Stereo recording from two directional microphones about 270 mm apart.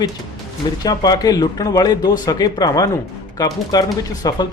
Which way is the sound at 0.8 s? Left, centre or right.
Centre.